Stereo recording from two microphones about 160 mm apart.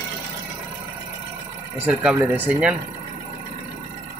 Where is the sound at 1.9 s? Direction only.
10° right (ahead or behind).